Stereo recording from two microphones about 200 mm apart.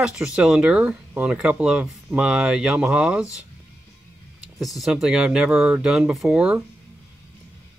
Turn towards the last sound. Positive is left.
turn(degrees=-5)  # may be behind; listen again after turning